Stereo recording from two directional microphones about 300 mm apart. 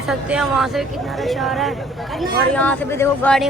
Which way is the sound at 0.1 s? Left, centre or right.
Centre.